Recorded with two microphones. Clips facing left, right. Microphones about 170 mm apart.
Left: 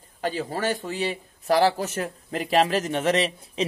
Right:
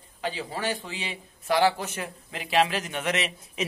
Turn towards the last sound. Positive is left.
turn(degrees=35)  # may be behind; listen again after turning